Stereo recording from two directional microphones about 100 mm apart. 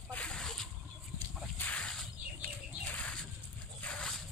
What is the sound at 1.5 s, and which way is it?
Whip, 15° left (ahead or behind).